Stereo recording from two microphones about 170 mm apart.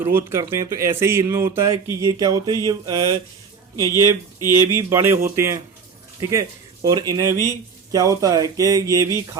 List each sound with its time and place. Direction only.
0.0 s speech: 15° right (ahead or behind)
4.5 s speech: 20° right (ahead or behind)